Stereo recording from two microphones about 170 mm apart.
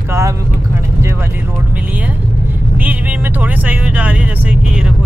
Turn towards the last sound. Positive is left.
turn(degrees=-5)  # may be behind; listen again after turning